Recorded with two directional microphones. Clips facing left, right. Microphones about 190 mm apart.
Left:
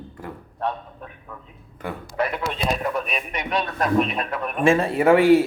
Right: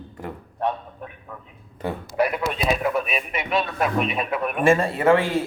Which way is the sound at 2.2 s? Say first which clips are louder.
Right 3 dB; 10° right (ahead or behind).